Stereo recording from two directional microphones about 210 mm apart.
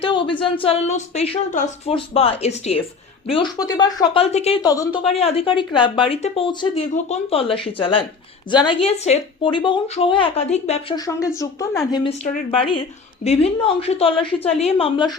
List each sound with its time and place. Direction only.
0.0 s speech: 25° left (ahead or behind)
4.6 s speech: 15° left (ahead or behind)
5.0 s speech: 30° left (ahead or behind)
10.9 s speech: 15° left (ahead or behind)
12.2 s speech: 30° left (ahead or behind)